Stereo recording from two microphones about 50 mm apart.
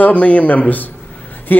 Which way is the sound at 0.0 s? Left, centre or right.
Left.